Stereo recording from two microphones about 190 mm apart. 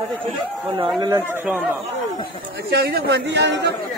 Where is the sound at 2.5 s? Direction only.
55° right (ahead or behind).